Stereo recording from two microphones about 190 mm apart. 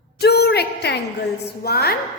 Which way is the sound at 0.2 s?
55° left (ahead or behind).